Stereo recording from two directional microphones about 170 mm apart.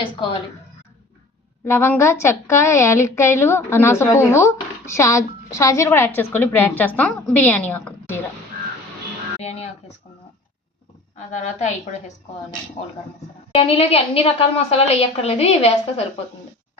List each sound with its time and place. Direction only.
0.0 s a woman's voice: 30° left (ahead or behind)
1.6 s a woman's voice: 15° left (ahead or behind)
9.4 s a woman's voice: 40° left (ahead or behind)
11.3 s a woman's voice: 45° left (ahead or behind)
13.5 s a woman's voice: 35° left (ahead or behind)